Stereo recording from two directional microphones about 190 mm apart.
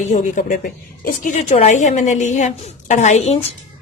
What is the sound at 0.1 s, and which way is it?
A woman's voice, 40° left (ahead or behind).